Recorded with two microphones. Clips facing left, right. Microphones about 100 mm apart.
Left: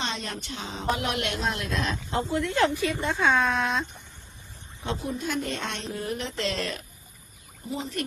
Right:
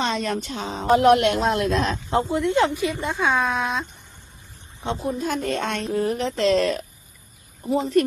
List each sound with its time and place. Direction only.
0.0 s a woman's voice: 50° right (ahead or behind)
2.0 s speech: 20° right (ahead or behind); by 3.8 s 5° right (ahead or behind)
4.9 s a woman's voice: 40° right (ahead or behind)